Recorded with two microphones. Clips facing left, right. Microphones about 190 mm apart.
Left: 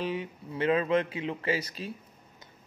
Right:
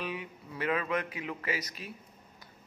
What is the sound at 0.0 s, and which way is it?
Speech, 30° left (ahead or behind).